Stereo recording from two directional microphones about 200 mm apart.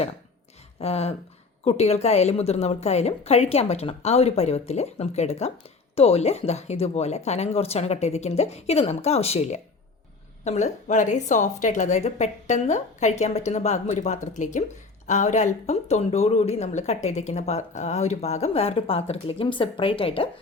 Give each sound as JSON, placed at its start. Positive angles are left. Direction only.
{"t": 0.8, "sound": "a woman's voice", "side_deg": 30}